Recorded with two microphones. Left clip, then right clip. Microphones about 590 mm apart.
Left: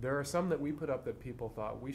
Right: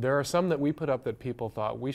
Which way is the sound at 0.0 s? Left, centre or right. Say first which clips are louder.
Right 8 dB; right.